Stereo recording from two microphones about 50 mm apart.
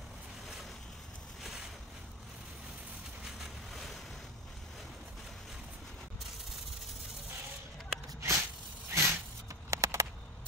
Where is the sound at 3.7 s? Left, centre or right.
Centre.